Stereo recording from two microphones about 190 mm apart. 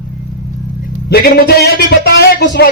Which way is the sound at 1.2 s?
55° left (ahead or behind).